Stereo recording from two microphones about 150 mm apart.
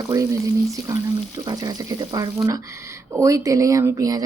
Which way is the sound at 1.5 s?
25° right (ahead or behind).